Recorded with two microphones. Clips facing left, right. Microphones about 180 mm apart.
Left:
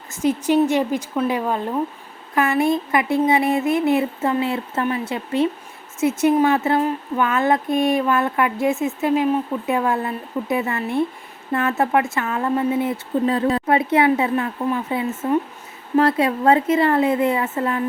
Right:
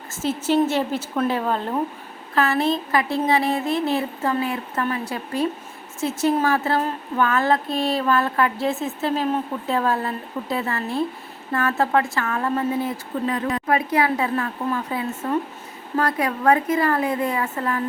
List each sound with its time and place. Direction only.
0.1 s a woman's voice: 15° left (ahead or behind)